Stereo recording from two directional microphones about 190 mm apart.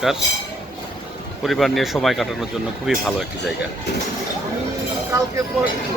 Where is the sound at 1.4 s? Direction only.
Centre (ahead or behind).